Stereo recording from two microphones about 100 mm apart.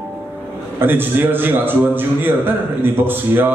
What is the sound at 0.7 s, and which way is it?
A man's voice, 20° right (ahead or behind).